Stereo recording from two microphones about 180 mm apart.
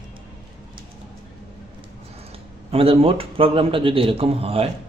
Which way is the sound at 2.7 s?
35° right (ahead or behind).